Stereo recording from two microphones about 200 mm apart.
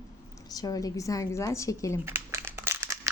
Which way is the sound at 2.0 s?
10° right (ahead or behind).